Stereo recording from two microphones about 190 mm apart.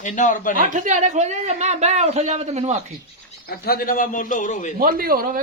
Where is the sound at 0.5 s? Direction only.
45° right (ahead or behind).